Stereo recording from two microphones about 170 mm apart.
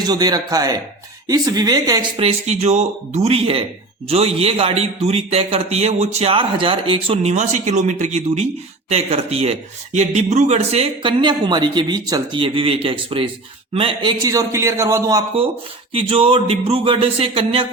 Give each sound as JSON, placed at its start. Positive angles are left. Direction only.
{"t": 0.0, "sound": "a man's voice", "side_deg": -25}
{"t": 2.1, "sound": "a man's voice", "side_deg": -40}
{"t": 15.9, "sound": "a man's voice", "side_deg": -35}